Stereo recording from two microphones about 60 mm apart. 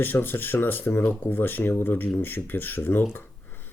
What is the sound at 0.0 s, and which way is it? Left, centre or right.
Speech, left.